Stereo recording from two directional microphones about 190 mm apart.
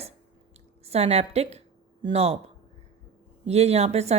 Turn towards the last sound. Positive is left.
turn(degrees=-35)  # may be behind; listen again after turning